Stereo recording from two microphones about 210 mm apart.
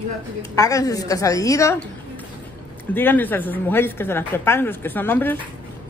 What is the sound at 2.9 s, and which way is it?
A woman's voice, 10° left (ahead or behind).